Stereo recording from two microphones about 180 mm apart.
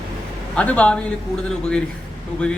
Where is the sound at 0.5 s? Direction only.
5° left (ahead or behind).